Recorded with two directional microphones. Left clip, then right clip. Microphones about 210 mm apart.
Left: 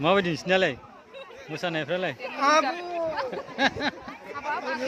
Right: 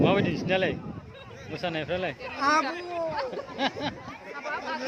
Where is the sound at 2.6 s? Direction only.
50° left (ahead or behind).